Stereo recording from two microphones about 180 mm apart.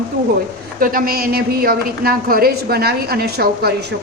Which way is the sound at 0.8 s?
50° right (ahead or behind).